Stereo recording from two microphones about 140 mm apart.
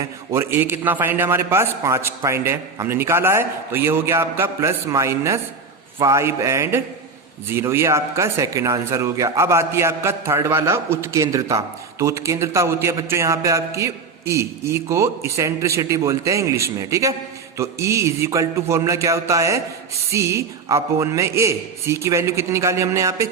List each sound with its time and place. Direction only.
0.0 s a man's voice: 20° right (ahead or behind)